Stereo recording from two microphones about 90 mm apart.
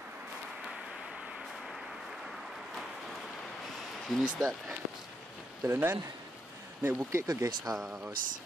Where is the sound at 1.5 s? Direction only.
Centre (ahead or behind).